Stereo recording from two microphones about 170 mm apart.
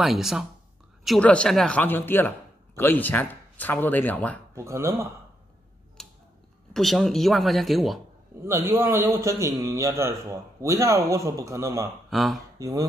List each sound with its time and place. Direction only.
0.0 s a man's voice: centre (ahead or behind)
4.6 s a man's voice: 15° right (ahead or behind)
6.0 s a sound: centre (ahead or behind)
6.7 s speech: centre (ahead or behind)
8.4 s a man's voice: 15° right (ahead or behind)
12.1 s speech: centre (ahead or behind)
12.5 s speech: 20° right (ahead or behind)